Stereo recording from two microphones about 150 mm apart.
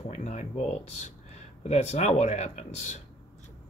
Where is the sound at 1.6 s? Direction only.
50° left (ahead or behind).